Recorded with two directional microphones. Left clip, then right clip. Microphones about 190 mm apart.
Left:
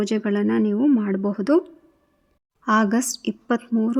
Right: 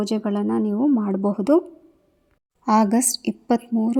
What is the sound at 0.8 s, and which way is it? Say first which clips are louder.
Speech: even; 10° left (ahead or behind).